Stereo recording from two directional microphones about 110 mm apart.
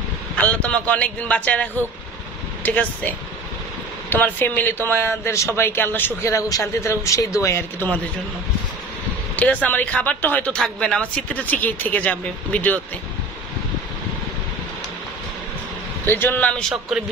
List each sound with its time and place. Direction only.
0.4 s a man's voice: 10° left (ahead or behind)
9.4 s speech: 15° left (ahead or behind)
16.1 s speech: 20° left (ahead or behind)